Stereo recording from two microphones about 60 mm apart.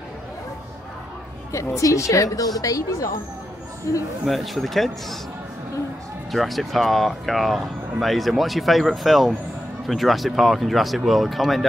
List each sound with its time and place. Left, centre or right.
1.8 s a woman's voice: left
2.6 s a woman's voice: left
4.3 s speech: centre
6.3 s speech: centre